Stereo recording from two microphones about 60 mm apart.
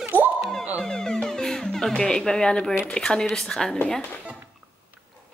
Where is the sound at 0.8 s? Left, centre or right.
Centre.